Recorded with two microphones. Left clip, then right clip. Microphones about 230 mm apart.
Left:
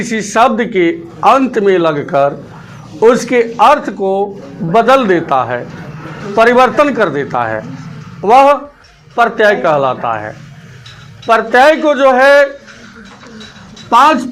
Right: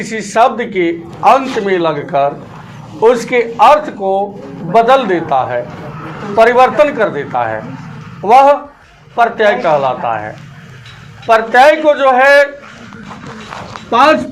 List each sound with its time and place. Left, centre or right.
0.0 s a man's voice: left
13.9 s a man's voice: left